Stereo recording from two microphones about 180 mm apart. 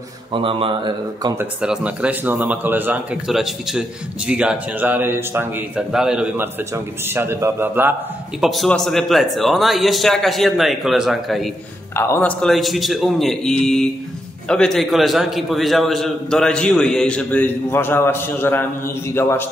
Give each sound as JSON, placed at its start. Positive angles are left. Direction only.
{"t": 0.3, "sound": "speech", "side_deg": -30}
{"t": 1.4, "sound": "a man's voice", "side_deg": -5}
{"t": 8.4, "sound": "a man's voice", "side_deg": 0}
{"t": 11.9, "sound": "a man's voice", "side_deg": 15}